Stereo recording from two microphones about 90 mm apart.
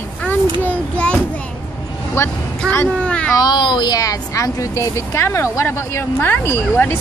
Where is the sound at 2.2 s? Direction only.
30° left (ahead or behind).